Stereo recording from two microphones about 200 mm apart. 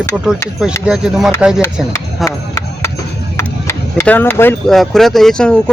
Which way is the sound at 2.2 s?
15° left (ahead or behind).